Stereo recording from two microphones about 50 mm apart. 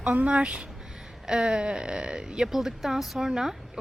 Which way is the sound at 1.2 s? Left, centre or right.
Centre.